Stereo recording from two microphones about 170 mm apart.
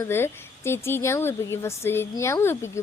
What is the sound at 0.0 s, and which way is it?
Speech, 15° left (ahead or behind).